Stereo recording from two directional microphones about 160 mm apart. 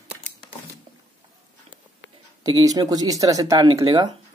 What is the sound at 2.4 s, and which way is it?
Speech, 25° right (ahead or behind).